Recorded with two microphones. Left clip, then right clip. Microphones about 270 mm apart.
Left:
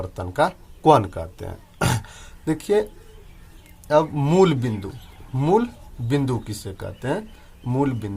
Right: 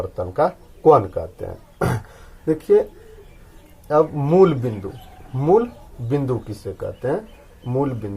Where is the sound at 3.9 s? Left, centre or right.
Left.